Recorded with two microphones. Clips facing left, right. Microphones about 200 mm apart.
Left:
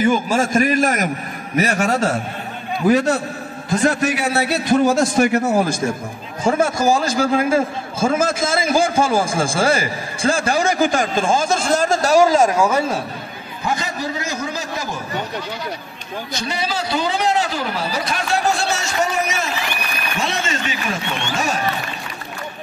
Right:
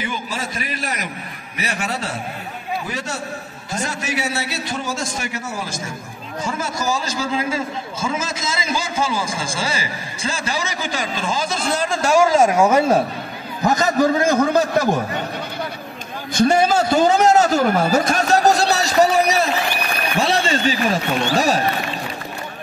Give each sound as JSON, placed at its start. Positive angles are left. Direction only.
{"t": 0.0, "sound": "a sound", "side_deg": 45}
{"t": 1.6, "sound": "a man's voice", "side_deg": 45}
{"t": 13.7, "sound": "a man's voice", "side_deg": -45}
{"t": 16.3, "sound": "a man's voice", "side_deg": -50}